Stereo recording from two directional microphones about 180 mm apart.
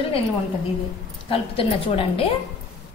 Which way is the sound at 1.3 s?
30° left (ahead or behind).